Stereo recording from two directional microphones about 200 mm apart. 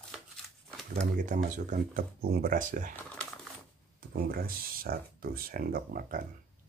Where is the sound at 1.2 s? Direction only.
40° right (ahead or behind).